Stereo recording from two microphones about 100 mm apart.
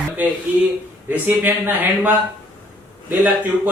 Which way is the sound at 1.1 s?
20° right (ahead or behind).